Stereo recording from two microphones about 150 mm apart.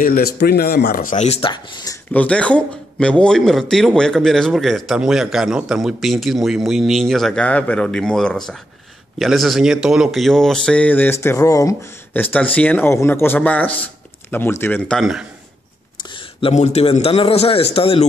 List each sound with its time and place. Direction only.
0.0 s speech: 80° left; by 1.5 s 45° left (ahead or behind)
1.5 s a man's voice: 30° left (ahead or behind)
2.1 s speech: 10° left (ahead or behind)
16.0 s a sound: 35° left (ahead or behind)
16.5 s a man's voice: 45° left (ahead or behind)